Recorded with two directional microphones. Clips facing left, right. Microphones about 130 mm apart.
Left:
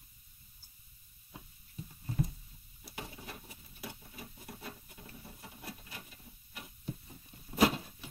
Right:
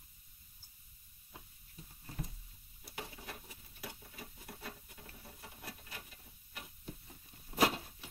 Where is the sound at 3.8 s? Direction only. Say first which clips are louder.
Left 2 dB; 20° left (ahead or behind).